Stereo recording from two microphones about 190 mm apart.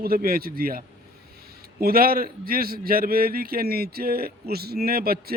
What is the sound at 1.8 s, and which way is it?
A man's voice, 50° right (ahead or behind).